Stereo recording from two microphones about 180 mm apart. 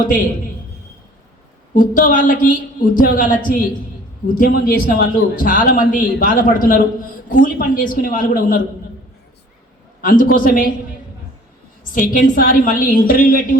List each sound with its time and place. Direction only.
1.7 s a man's voice: 50° left (ahead or behind)
10.0 s a man's voice: 50° left (ahead or behind)
12.1 s a man's voice: 50° left (ahead or behind)